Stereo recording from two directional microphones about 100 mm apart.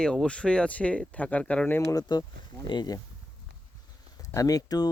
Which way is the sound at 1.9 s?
40° left (ahead or behind).